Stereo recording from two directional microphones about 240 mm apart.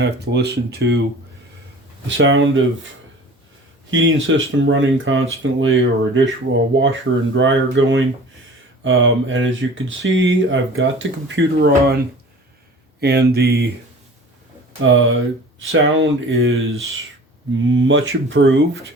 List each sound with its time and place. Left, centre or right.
0.0 s speech: right
2.0 s speech: right
3.9 s speech: right
13.0 s speech: right
14.8 s speech: right
17.7 s speech: right